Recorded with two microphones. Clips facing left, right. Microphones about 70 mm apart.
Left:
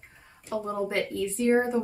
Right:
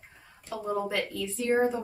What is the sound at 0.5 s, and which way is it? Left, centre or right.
A woman's voice, left.